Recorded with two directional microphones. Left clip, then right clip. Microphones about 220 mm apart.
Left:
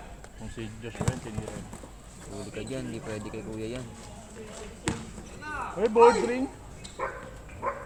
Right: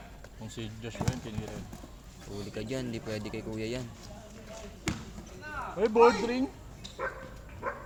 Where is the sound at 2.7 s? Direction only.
35° right (ahead or behind).